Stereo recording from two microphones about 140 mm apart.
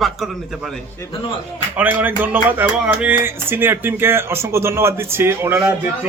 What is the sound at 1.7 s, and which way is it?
Speech, 10° right (ahead or behind).